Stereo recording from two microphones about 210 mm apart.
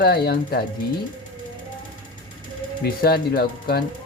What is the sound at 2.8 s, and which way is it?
Speech, 50° left (ahead or behind).